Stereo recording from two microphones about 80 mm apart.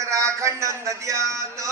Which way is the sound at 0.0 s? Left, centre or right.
Right.